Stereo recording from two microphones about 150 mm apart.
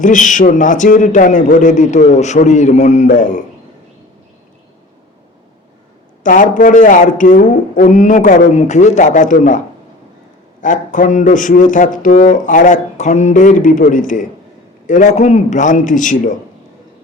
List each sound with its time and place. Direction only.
0.0 s a man's voice: 60° left (ahead or behind)
6.2 s a man's voice: 60° left (ahead or behind)
10.6 s a man's voice: 60° left (ahead or behind)